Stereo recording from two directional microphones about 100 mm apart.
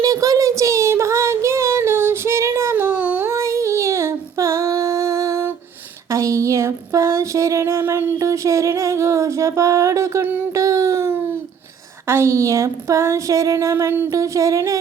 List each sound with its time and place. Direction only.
0.0 s child singing: 35° right (ahead or behind); by 3.3 s 20° right (ahead or behind)
3.3 s female singing: 30° right (ahead or behind)
6.1 s a sound: 30° right (ahead or behind)
14.1 s music: 35° right (ahead or behind)